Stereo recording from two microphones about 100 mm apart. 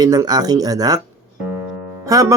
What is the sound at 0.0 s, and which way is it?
Speech, 40° right (ahead or behind).